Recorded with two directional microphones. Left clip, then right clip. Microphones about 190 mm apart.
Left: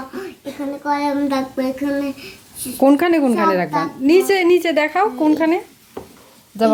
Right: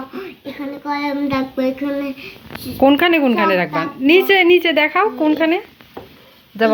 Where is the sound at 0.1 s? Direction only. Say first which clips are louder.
Even; 15° left (ahead or behind).